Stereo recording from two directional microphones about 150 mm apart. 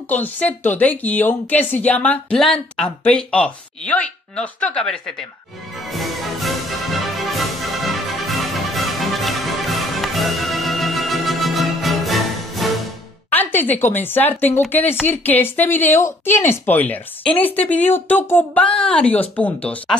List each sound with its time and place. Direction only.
0.1 s a woman's voice: 10° left (ahead or behind)
5.9 s music: centre (ahead or behind)
13.3 s a woman's voice: 10° left (ahead or behind)